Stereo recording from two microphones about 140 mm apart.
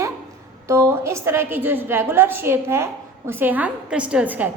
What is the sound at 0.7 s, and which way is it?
A woman's voice, 20° right (ahead or behind).